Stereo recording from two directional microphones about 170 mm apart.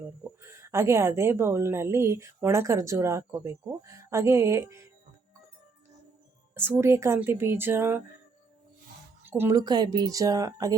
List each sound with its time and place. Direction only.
0.4 s a woman's voice: 15° right (ahead or behind)
6.5 s a woman's voice: 15° right (ahead or behind)
9.2 s speech: 15° right (ahead or behind)